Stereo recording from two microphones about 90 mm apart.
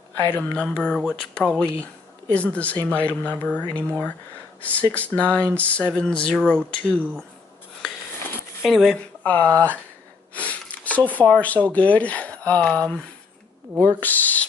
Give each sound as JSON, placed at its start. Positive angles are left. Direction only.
{"t": 0.3, "sound": "speech", "side_deg": 15}
{"t": 8.6, "sound": "speech", "side_deg": 5}
{"t": 9.2, "sound": "speech", "side_deg": 20}
{"t": 10.3, "sound": "sniff", "side_deg": 15}
{"t": 11.1, "sound": "speech", "side_deg": 15}
{"t": 13.9, "sound": "speech", "side_deg": 20}